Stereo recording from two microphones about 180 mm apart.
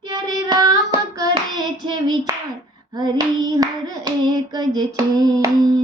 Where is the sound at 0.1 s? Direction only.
20° right (ahead or behind).